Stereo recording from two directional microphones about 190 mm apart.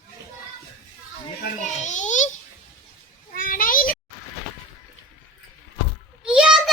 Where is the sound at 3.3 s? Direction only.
45° left (ahead or behind).